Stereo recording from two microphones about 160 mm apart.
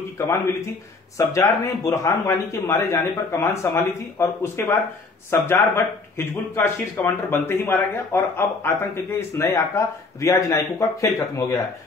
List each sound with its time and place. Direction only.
0.2 s speech: 15° left (ahead or behind)